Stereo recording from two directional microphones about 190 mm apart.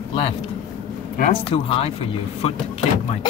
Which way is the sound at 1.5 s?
30° left (ahead or behind).